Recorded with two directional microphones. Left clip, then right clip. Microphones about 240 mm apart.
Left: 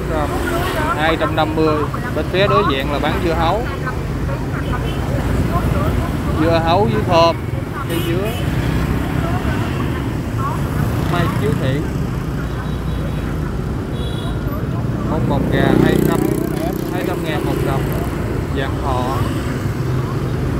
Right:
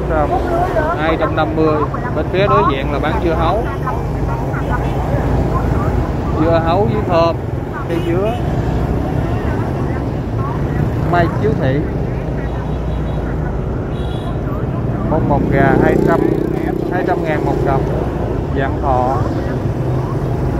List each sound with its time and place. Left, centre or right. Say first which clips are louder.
1.0 s speech: right 1 dB; left
6.4 s speech: right 1 dB; centre
15.5 s speech: right 2 dB; centre